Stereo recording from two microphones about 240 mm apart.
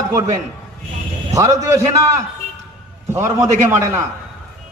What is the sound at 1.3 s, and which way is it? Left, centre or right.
Speech, centre.